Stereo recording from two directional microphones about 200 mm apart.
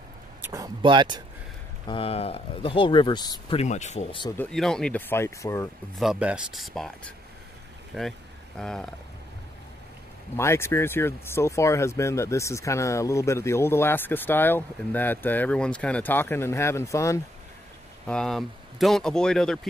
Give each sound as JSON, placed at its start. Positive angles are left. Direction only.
{"t": 0.4, "sound": "speech", "side_deg": -15}
{"t": 1.9, "sound": "speech", "side_deg": 30}
{"t": 4.4, "sound": "speech", "side_deg": 5}
{"t": 5.9, "sound": "speech", "side_deg": -5}
{"t": 8.5, "sound": "speech", "side_deg": 5}
{"t": 10.3, "sound": "speech", "side_deg": 15}
{"t": 18.0, "sound": "speech", "side_deg": 5}